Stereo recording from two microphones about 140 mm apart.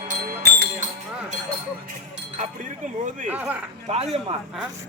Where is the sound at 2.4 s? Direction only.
60° right (ahead or behind).